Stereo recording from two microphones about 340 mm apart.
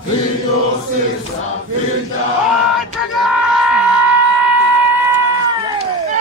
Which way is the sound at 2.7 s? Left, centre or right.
Centre.